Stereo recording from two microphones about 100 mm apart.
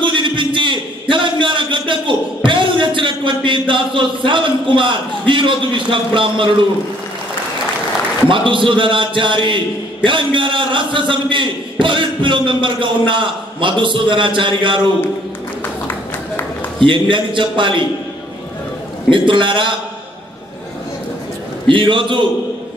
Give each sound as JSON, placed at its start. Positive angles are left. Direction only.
{"t": 0.0, "sound": "a sound", "side_deg": -55}
{"t": 8.3, "sound": "a man's voice", "side_deg": -55}
{"t": 15.6, "sound": "a sound", "side_deg": 20}
{"t": 16.8, "sound": "a man's voice", "side_deg": -55}
{"t": 19.0, "sound": "a man's voice", "side_deg": -55}
{"t": 21.6, "sound": "a man's voice", "side_deg": -55}